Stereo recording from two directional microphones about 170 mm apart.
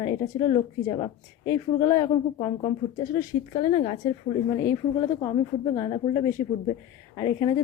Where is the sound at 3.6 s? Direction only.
35° left (ahead or behind).